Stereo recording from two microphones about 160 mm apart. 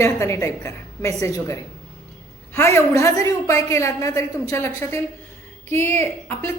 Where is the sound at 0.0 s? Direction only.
15° left (ahead or behind).